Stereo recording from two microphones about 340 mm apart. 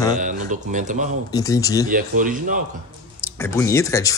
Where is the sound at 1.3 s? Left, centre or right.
Centre.